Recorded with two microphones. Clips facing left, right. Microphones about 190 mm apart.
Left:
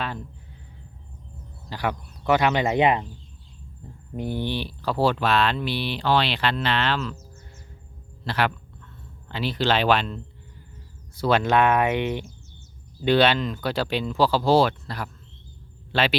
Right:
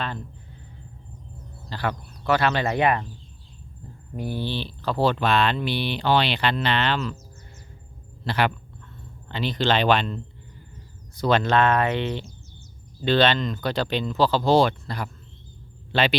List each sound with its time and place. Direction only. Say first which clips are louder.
1.7 s speech: left 1 dB; 15° left (ahead or behind)
4.2 s speech: left 1 dB; 20° left (ahead or behind); by 7.2 s centre (ahead or behind)
8.2 s speech: right 1 dB; centre (ahead or behind)